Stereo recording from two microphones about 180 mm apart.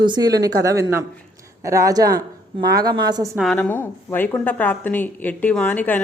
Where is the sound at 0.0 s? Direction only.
25° right (ahead or behind).